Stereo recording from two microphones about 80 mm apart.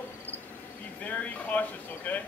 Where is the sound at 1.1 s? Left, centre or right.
Centre.